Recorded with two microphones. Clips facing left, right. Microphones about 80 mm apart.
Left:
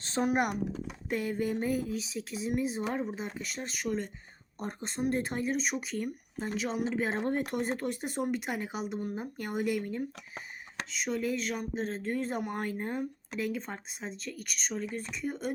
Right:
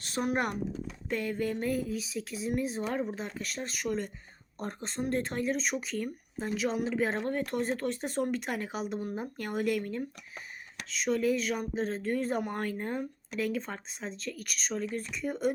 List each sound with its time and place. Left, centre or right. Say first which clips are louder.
0.0 s speech: left 2 dB; left; by 7.2 s centre
7.2 s speech: even; left; by 15.5 s centre